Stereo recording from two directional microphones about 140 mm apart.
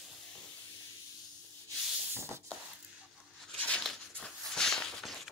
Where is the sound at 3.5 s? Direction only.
10° left (ahead or behind).